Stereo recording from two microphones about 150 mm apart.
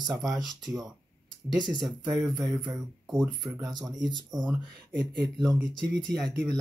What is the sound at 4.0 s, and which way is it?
Speech, 25° right (ahead or behind).